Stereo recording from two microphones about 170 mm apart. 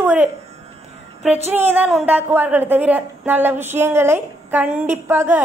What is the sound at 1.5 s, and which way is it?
A woman's voice, 10° right (ahead or behind).